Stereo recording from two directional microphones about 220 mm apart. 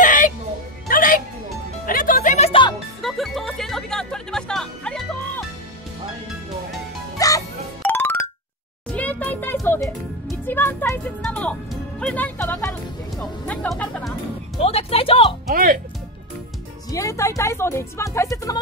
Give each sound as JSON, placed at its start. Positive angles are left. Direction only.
{"t": 0.0, "sound": "music", "side_deg": 35}
{"t": 3.0, "sound": "music", "side_deg": 0}
{"t": 7.2, "sound": "music", "side_deg": 15}
{"t": 14.6, "sound": "a sound", "side_deg": 25}
{"t": 15.5, "sound": "music", "side_deg": -40}
{"t": 16.9, "sound": "music", "side_deg": 15}